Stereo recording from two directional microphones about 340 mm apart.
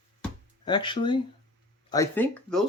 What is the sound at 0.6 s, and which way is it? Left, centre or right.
Speech, centre.